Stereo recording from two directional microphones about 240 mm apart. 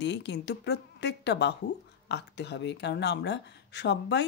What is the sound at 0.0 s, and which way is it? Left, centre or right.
Speech, left.